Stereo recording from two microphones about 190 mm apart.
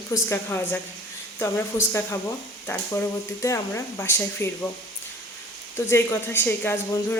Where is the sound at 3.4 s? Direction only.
15° left (ahead or behind).